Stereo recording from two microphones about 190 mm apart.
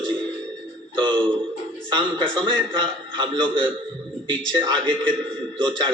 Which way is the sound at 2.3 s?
25° right (ahead or behind).